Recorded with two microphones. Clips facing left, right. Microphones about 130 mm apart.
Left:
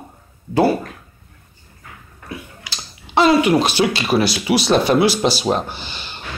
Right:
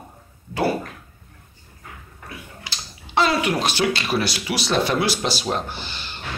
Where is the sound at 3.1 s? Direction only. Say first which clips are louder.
Left 7 dB; 20° left (ahead or behind).